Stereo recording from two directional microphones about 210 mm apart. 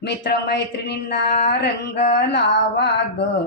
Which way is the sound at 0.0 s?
50° left (ahead or behind).